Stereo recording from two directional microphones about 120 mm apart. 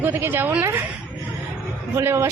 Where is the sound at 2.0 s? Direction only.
20° right (ahead or behind).